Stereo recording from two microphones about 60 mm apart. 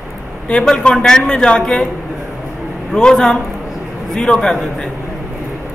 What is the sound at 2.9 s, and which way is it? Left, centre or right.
Speech, centre.